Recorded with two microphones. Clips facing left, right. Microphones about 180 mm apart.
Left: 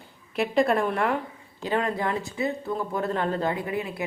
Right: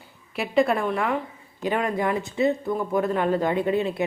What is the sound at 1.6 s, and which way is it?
Speech, 15° right (ahead or behind).